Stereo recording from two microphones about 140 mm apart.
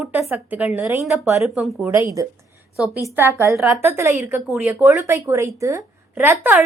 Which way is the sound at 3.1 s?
15° right (ahead or behind).